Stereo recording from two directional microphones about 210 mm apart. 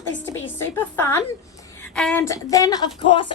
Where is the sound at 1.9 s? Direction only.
5° left (ahead or behind).